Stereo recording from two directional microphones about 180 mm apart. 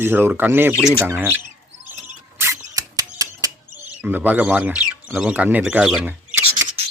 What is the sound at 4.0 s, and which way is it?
Speech, 10° right (ahead or behind).